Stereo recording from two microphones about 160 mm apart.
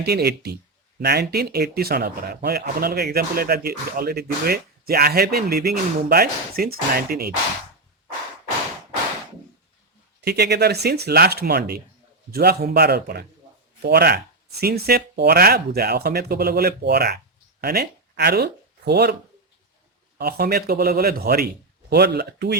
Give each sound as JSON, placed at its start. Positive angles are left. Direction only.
{"t": 0.0, "sound": "a man's voice", "side_deg": -90}
{"t": 10.2, "sound": "a man's voice", "side_deg": -90}
{"t": 14.6, "sound": "speech", "side_deg": -75}
{"t": 20.1, "sound": "a man's voice", "side_deg": -75}
{"t": 21.8, "sound": "speech", "side_deg": -90}